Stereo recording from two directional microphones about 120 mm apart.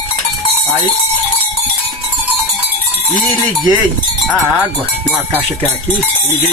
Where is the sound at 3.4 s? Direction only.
35° right (ahead or behind).